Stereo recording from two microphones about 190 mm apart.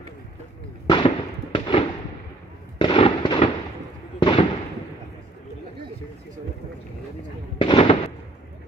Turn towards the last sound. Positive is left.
turn(degrees=25)  # may be behind; listen again after turning